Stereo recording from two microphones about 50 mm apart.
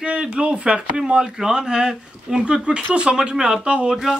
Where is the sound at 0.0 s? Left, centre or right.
Right.